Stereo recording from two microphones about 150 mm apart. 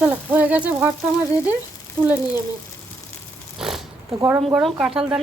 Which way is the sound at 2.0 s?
10° right (ahead or behind).